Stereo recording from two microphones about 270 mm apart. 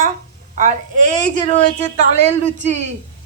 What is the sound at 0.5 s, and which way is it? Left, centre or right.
Speech, right.